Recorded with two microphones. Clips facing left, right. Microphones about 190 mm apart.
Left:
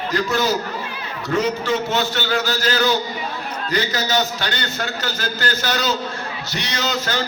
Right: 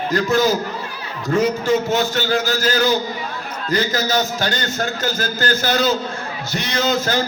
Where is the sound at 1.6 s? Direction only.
45° right (ahead or behind).